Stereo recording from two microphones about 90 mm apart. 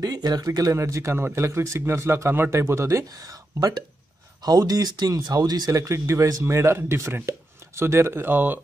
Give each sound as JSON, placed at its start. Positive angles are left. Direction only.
{"t": 0.0, "sound": "speech", "side_deg": -45}
{"t": 4.4, "sound": "speech", "side_deg": -45}